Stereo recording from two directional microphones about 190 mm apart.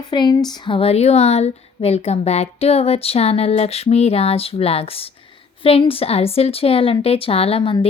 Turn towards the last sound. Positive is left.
turn(degrees=30)  # may be behind; listen again after turning